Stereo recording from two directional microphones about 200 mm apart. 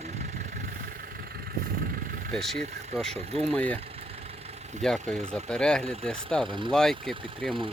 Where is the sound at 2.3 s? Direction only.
5° left (ahead or behind).